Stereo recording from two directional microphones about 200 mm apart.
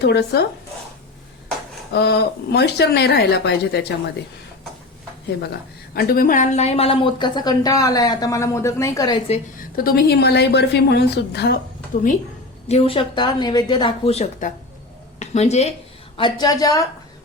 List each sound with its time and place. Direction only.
0.0 s a woman's voice: 55° left (ahead or behind)
1.9 s a woman's voice: 55° left (ahead or behind)
5.9 s speech: 50° left (ahead or behind); by 9.2 s 20° left (ahead or behind)
9.3 s a woman's voice: 45° left (ahead or behind)
12.6 s speech: 30° left (ahead or behind)
16.1 s speech: 20° left (ahead or behind)